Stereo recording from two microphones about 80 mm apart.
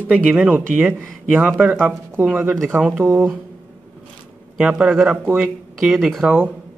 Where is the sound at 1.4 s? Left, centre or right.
Centre.